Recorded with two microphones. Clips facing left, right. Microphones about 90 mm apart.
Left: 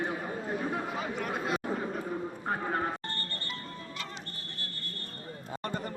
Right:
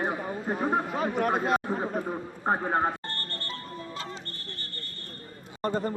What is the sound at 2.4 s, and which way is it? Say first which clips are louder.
Speech: right 8 dB; 35° right (ahead or behind).